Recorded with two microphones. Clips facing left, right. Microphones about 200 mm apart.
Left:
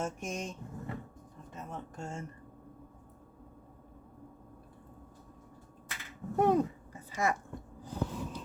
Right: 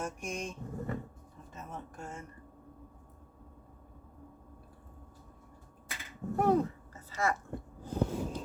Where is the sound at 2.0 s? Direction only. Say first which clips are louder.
Left 5 dB; 25° left (ahead or behind).